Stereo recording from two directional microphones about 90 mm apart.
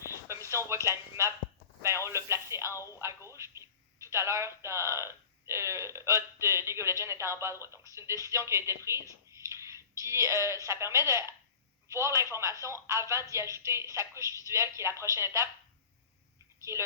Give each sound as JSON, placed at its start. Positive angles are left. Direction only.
{"t": 0.0, "sound": "a sound", "side_deg": -30}
{"t": 0.9, "sound": "speech", "side_deg": -30}
{"t": 16.7, "sound": "speech", "side_deg": -30}